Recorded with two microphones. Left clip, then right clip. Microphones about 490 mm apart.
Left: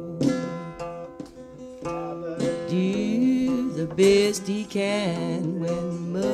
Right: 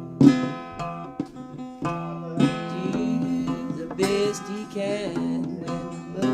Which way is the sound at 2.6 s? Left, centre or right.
Left.